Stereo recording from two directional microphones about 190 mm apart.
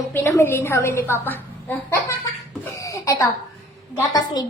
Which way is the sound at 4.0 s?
20° left (ahead or behind).